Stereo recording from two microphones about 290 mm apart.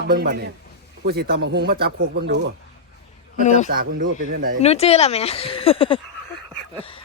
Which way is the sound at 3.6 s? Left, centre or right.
Right.